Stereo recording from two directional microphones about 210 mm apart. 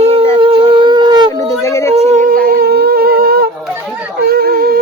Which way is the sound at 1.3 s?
15° left (ahead or behind).